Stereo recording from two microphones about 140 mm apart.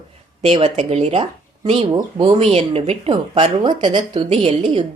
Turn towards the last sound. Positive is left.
turn(degrees=-40)  # may be behind; listen again after turning